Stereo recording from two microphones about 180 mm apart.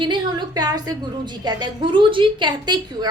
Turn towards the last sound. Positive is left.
turn(degrees=-25)  # may be behind; listen again after turning